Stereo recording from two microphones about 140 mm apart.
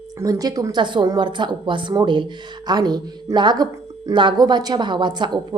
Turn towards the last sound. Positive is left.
turn(degrees=-35)  # may be behind; listen again after turning